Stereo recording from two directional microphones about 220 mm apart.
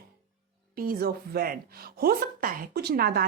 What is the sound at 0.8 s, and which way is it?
A woman's voice, 45° right (ahead or behind).